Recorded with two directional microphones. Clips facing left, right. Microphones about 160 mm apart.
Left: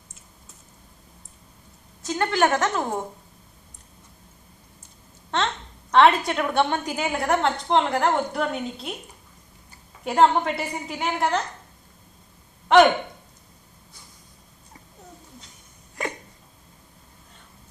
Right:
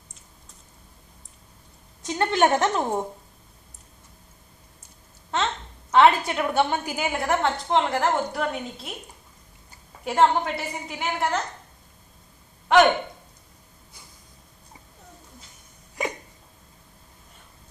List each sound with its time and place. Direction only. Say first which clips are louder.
2.0 s a woman's voice: right 1 dB; 20° right (ahead or behind)
5.9 s a woman's voice: even; 5° right (ahead or behind)
10.0 s a woman's voice: left 2 dB; centre (ahead or behind)
12.6 s speech: left 2 dB; centre (ahead or behind)